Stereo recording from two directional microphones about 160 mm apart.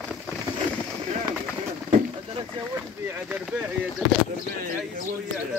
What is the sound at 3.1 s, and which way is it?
Speech, 5° right (ahead or behind).